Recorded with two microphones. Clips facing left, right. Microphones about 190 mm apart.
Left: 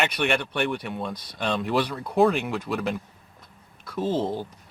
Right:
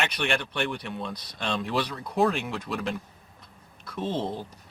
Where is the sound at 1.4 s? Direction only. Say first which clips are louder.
Left 4 dB; 5° left (ahead or behind).